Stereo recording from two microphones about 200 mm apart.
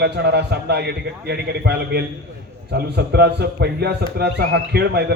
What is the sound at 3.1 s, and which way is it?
A man's voice, 55° right (ahead or behind).